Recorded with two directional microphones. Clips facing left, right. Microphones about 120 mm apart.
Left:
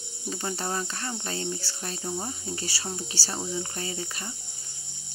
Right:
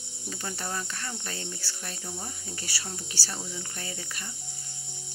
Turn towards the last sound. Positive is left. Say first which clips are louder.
# left 5 dB
turn(degrees=25)  # may be behind; listen again after turning